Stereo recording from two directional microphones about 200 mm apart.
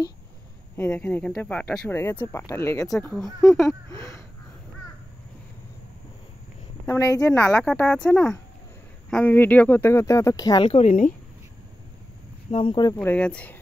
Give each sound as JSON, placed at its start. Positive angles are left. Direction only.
{"t": 0.7, "sound": "speech", "side_deg": 10}
{"t": 3.9, "sound": "speech", "side_deg": 15}
{"t": 6.9, "sound": "speech", "side_deg": 15}
{"t": 7.2, "sound": "speech", "side_deg": 5}
{"t": 10.7, "sound": "speech", "side_deg": 35}
{"t": 12.4, "sound": "speech", "side_deg": 25}